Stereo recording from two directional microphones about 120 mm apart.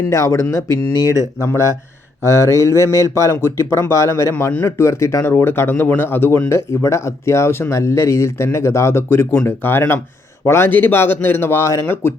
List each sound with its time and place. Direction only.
0.1 s speech: 25° left (ahead or behind)